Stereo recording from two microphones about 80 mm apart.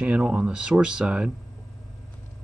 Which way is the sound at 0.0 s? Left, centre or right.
Centre.